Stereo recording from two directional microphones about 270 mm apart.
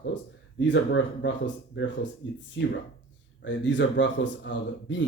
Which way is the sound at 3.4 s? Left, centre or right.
Left.